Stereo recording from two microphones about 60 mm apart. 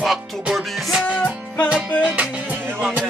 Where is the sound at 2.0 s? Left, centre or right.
Right.